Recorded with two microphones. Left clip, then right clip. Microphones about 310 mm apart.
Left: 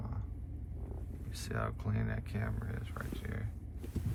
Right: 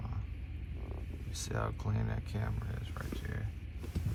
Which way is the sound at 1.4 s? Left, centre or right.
Centre.